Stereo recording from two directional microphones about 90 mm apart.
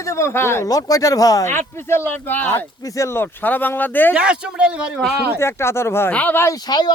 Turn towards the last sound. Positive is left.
turn(degrees=50)  # may be behind; listen again after turning